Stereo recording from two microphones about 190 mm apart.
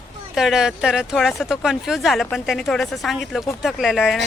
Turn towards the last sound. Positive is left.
turn(degrees=0)  # may be behind; listen again after turning